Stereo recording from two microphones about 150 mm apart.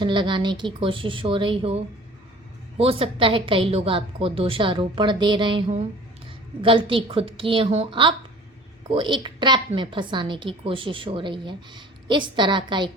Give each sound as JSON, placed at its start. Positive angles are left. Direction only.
{"t": 0.0, "sound": "a woman's voice", "side_deg": -30}